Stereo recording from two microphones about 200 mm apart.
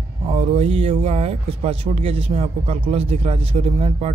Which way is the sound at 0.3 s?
30° right (ahead or behind).